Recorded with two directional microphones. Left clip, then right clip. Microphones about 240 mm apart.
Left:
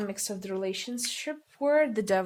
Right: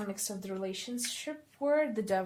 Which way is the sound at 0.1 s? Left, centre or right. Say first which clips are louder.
Left 5 dB; left.